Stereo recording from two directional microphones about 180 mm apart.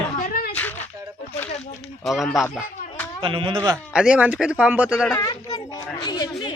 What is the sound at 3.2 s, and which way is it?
Speech, 30° right (ahead or behind).